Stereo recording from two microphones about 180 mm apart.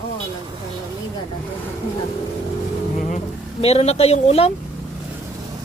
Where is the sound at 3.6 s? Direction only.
35° left (ahead or behind).